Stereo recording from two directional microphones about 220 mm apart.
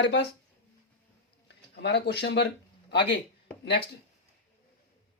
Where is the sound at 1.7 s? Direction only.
50° left (ahead or behind).